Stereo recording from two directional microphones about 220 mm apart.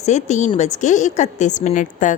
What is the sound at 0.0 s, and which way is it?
A woman's voice, 30° left (ahead or behind).